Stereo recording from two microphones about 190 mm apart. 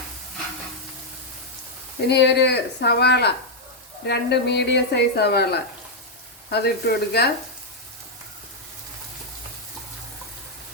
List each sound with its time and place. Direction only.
2.0 s speech: 65° left (ahead or behind)